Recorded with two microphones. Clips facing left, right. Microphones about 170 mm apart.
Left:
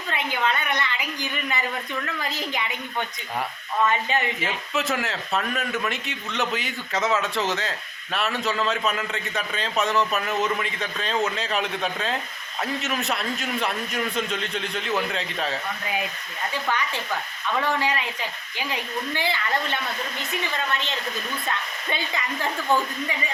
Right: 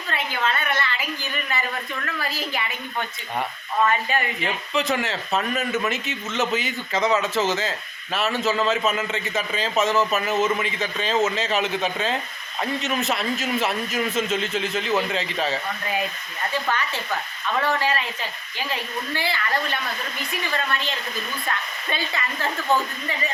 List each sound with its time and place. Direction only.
0.1 s speech: 15° left (ahead or behind)
4.4 s speech: centre (ahead or behind)
16.6 s speech: 15° left (ahead or behind)
21.4 s speech: 20° left (ahead or behind)